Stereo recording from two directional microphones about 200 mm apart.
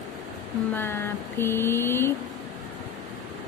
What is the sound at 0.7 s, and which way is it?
Vehicle, 10° left (ahead or behind).